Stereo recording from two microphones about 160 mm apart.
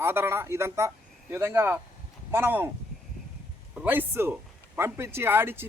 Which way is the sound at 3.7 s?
10° right (ahead or behind).